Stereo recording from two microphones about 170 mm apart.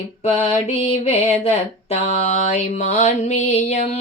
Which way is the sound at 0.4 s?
40° left (ahead or behind).